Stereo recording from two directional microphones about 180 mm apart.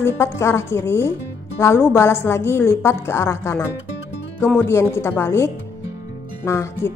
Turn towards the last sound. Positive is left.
turn(degrees=15)  # may be behind; listen again after turning